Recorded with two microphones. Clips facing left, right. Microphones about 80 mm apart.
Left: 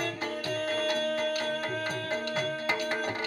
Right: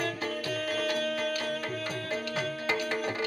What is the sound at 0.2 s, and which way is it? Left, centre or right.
Music, left.